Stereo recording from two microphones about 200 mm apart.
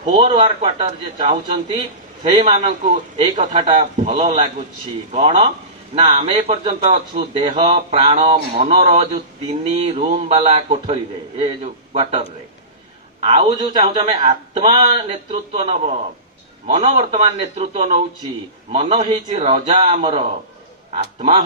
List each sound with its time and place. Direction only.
0.2 s a man's voice: 25° right (ahead or behind)
13.2 s a man's voice: 30° right (ahead or behind)